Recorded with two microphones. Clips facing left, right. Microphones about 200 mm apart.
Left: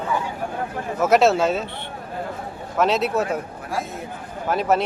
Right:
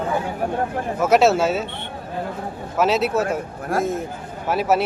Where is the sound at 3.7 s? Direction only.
50° right (ahead or behind).